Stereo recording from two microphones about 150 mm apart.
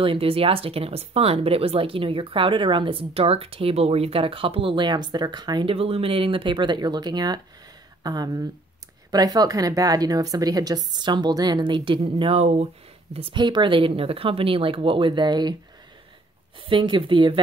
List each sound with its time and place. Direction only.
0.0 s a woman's voice: 35° right (ahead or behind)
13.1 s speech: 35° right (ahead or behind)
16.5 s speech: 35° right (ahead or behind)